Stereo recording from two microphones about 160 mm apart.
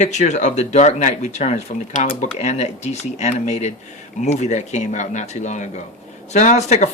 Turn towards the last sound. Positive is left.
turn(degrees=45)  # may be behind; listen again after turning